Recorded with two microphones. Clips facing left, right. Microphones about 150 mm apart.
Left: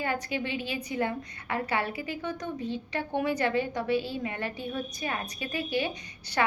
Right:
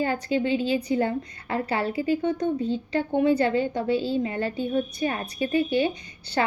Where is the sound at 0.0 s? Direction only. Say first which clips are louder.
Right 7 dB; 30° right (ahead or behind).